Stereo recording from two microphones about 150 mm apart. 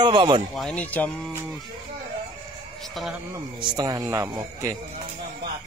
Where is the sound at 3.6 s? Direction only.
25° right (ahead or behind).